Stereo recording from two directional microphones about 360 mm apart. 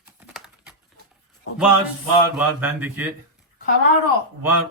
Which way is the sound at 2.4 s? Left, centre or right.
Centre.